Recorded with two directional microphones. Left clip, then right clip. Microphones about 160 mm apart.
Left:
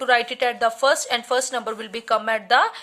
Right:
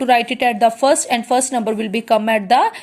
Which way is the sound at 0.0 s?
10° right (ahead or behind).